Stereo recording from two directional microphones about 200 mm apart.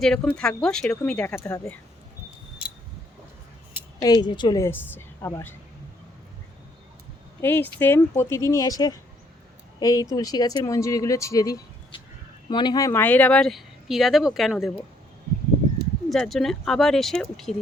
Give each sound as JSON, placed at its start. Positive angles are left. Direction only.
{"t": 0.0, "sound": "speech", "side_deg": 5}
{"t": 4.0, "sound": "speech", "side_deg": 20}
{"t": 7.4, "sound": "speech", "side_deg": 10}
{"t": 16.0, "sound": "speech", "side_deg": 0}